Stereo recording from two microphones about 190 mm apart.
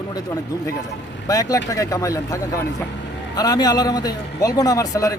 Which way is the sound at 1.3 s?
20° left (ahead or behind).